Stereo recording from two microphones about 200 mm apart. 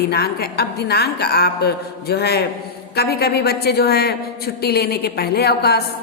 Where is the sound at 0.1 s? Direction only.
50° left (ahead or behind).